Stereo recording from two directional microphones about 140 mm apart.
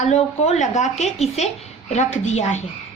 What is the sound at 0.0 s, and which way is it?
A woman's voice, 50° left (ahead or behind).